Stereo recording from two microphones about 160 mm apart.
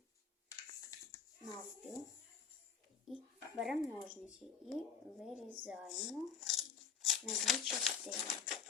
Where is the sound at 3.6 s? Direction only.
5° right (ahead or behind).